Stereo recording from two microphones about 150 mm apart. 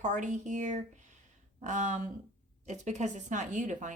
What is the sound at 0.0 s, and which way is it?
A woman's voice, 55° right (ahead or behind).